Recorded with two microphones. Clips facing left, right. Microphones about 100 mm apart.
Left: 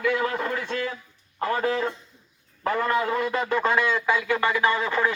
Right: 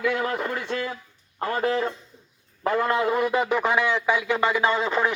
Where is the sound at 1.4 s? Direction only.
25° left (ahead or behind).